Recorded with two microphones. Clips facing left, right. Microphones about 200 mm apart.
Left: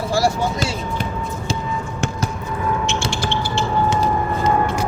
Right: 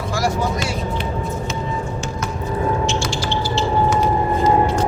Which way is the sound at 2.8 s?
55° left (ahead or behind).